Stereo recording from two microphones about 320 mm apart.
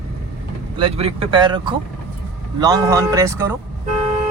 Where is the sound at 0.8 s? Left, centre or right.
Centre.